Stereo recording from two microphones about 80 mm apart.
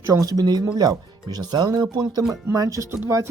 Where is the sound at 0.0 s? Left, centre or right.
Right.